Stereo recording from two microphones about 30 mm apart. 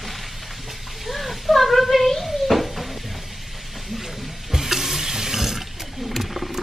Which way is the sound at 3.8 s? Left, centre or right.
Centre.